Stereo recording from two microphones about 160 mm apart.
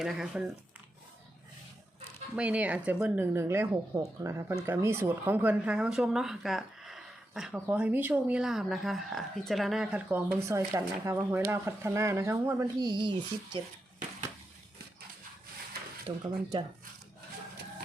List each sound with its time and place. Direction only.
0.0 s speech: 5° right (ahead or behind)
2.3 s speech: 10° right (ahead or behind)
10.1 s speech: 15° right (ahead or behind); by 13.6 s 30° right (ahead or behind)
16.0 s speech: 30° right (ahead or behind)